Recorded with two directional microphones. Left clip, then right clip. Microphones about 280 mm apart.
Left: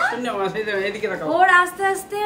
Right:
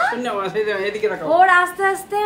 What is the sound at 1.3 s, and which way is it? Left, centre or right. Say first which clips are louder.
Speech: right 1 dB; centre.